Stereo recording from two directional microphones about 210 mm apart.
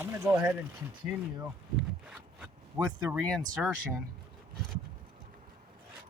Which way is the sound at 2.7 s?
20° right (ahead or behind).